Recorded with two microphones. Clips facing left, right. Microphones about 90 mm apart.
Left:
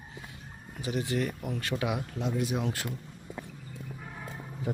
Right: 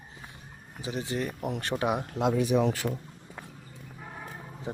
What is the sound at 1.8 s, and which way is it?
Speech, 45° right (ahead or behind).